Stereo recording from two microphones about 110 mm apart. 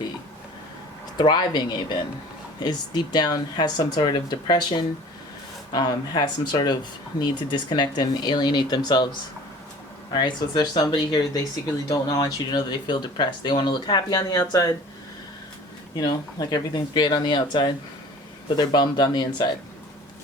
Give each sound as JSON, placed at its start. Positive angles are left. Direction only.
{"t": 1.2, "sound": "speech", "side_deg": 40}
{"t": 10.1, "sound": "speech", "side_deg": 45}
{"t": 16.0, "sound": "speech", "side_deg": 35}